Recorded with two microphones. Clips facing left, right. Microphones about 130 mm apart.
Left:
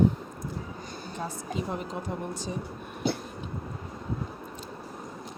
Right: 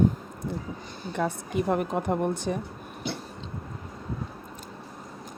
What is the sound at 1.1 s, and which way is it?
Speech, 60° right (ahead or behind).